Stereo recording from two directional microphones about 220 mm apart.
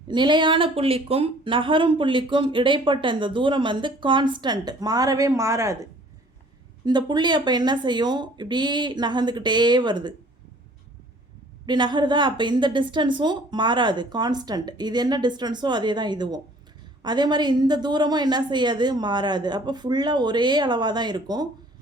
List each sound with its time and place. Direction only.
0.1 s speech: 20° right (ahead or behind)
11.6 s speech: 20° right (ahead or behind)